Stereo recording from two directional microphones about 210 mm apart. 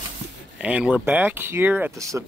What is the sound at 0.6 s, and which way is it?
Speech, 5° right (ahead or behind).